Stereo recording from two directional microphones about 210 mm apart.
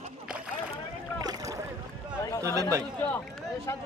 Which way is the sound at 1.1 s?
15° right (ahead or behind).